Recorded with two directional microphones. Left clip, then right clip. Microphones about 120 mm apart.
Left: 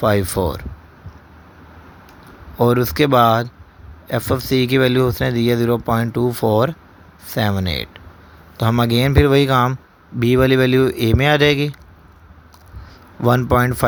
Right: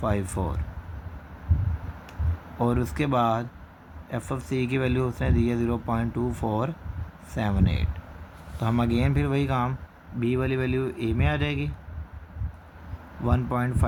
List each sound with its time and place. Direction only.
0.0 s speech: 45° left (ahead or behind)
2.6 s speech: 45° left (ahead or behind)
6.2 s speech: 45° left (ahead or behind)
10.2 s speech: 70° left (ahead or behind)
13.2 s speech: 60° left (ahead or behind)